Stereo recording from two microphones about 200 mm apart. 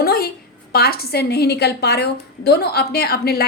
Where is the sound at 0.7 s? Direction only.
50° left (ahead or behind).